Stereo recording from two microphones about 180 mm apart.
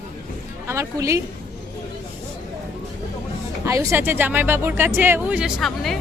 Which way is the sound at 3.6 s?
15° right (ahead or behind).